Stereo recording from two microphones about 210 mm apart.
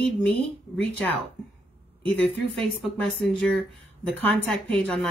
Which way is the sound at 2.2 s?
5° left (ahead or behind).